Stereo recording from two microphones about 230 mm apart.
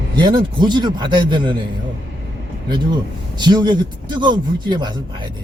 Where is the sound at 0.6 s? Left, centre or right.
Centre.